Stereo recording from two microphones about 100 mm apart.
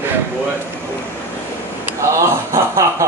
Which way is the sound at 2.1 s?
30° right (ahead or behind).